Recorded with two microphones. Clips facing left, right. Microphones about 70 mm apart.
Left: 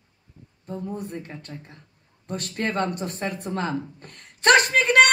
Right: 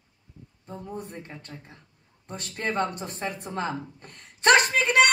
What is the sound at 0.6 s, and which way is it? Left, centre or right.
Speech, right.